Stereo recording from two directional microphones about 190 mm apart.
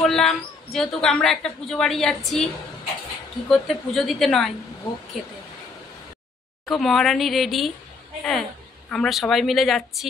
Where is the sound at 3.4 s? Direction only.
Centre (ahead or behind).